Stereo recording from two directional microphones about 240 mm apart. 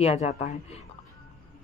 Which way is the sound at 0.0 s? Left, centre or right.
Left.